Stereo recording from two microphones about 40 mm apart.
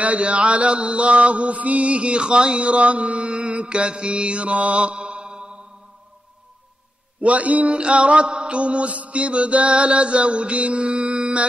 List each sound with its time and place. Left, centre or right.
0.0 s mantra: right
7.2 s mantra: right